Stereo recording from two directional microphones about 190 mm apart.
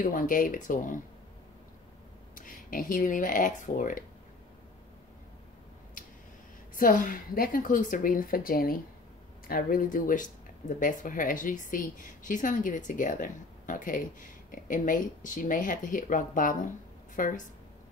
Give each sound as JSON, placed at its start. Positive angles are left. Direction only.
{"t": 0.0, "sound": "a woman's voice", "side_deg": 45}
{"t": 2.3, "sound": "speech", "side_deg": 45}
{"t": 6.8, "sound": "a woman's voice", "side_deg": 45}